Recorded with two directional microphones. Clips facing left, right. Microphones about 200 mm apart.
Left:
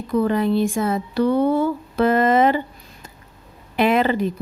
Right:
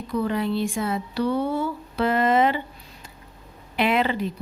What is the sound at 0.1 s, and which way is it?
A woman's voice, 50° left (ahead or behind).